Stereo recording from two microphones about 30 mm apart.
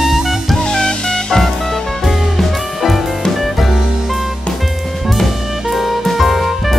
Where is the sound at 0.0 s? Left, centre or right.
Centre.